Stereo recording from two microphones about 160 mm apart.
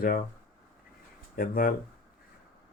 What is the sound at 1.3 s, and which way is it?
Speech, 65° left (ahead or behind).